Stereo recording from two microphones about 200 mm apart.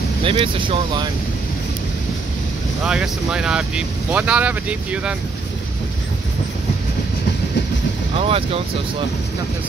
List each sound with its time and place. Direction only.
0.2 s speech: 25° right (ahead or behind)
2.8 s speech: 5° right (ahead or behind)
8.1 s speech: 30° right (ahead or behind)